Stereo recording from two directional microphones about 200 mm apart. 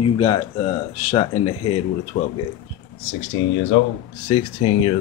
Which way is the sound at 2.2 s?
40° left (ahead or behind).